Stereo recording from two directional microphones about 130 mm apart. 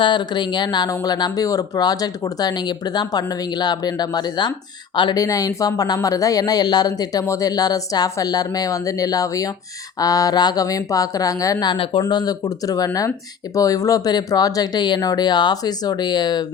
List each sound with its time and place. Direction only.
0.0 s speech: 35° left (ahead or behind)